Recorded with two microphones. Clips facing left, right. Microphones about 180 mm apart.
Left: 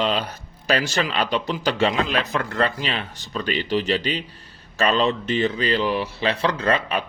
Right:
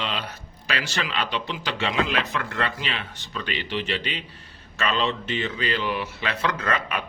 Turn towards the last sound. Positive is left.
turn(degrees=30)  # may be behind; listen again after turning